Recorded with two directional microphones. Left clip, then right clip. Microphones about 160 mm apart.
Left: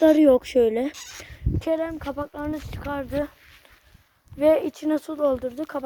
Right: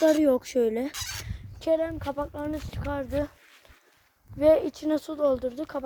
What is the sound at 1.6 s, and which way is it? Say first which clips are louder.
Speech: even; 30° left (ahead or behind).